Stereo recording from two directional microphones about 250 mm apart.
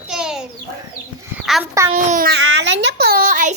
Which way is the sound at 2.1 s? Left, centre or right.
Right.